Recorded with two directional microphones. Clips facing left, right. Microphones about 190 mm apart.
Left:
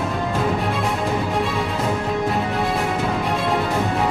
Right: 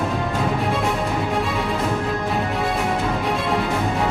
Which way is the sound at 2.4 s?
Centre (ahead or behind).